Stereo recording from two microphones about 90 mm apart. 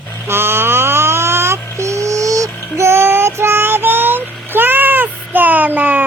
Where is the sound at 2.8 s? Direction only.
30° right (ahead or behind).